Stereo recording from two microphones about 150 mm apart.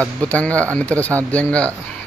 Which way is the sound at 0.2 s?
10° left (ahead or behind).